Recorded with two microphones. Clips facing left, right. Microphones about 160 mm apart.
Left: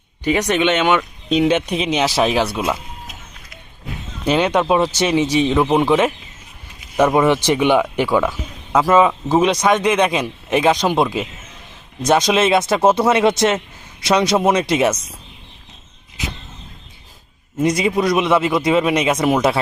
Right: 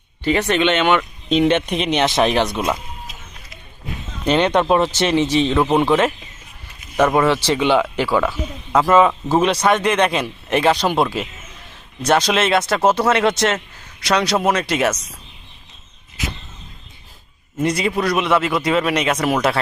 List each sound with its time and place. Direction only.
0.3 s speech: 15° left (ahead or behind)
4.3 s speech: 10° left (ahead or behind)
17.6 s speech: 15° left (ahead or behind)